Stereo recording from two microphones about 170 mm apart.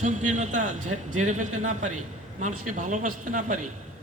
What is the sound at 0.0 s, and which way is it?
A man's voice, 45° right (ahead or behind).